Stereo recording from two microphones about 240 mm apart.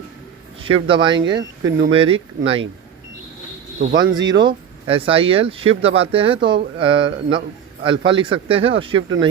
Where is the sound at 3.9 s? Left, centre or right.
Centre.